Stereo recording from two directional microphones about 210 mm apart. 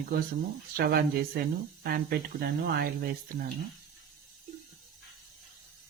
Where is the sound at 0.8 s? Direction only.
45° right (ahead or behind).